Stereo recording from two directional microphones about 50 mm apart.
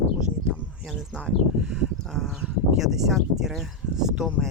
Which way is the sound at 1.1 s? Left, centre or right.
Centre.